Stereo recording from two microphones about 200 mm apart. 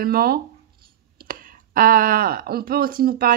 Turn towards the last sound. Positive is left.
turn(degrees=-45)  # may be behind; listen again after turning